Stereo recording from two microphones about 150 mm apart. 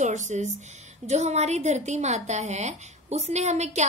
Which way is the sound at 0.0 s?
50° right (ahead or behind).